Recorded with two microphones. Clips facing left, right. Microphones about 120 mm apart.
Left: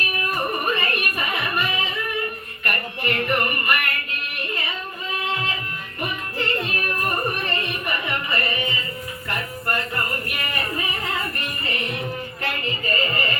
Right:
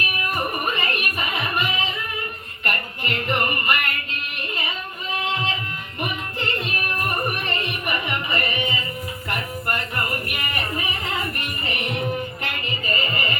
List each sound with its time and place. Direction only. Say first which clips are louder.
0.3 s music: left 1 dB; 15° right (ahead or behind)
5.2 s a sound: right 1 dB; 20° right (ahead or behind)
6.0 s music: even; 20° right (ahead or behind)